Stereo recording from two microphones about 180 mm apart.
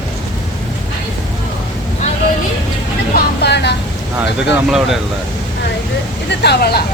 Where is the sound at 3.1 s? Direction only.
65° left (ahead or behind).